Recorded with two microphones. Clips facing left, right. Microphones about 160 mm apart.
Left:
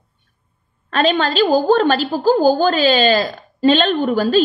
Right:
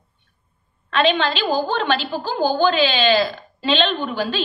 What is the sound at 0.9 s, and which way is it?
A woman's voice, 40° left (ahead or behind).